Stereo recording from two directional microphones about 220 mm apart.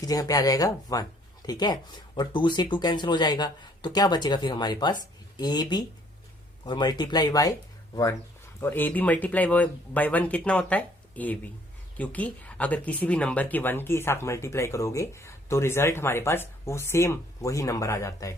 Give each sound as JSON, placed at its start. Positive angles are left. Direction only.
{"t": 0.0, "sound": "speech", "side_deg": 15}
{"t": 8.6, "sound": "speech", "side_deg": 10}